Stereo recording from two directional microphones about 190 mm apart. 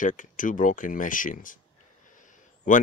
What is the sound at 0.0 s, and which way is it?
Speech, 45° left (ahead or behind).